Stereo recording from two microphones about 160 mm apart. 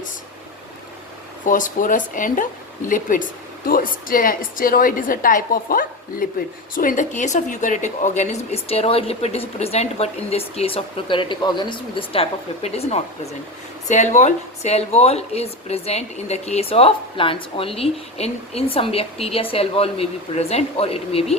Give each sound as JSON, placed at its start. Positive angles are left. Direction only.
{"t": 1.5, "sound": "a woman's voice", "side_deg": 55}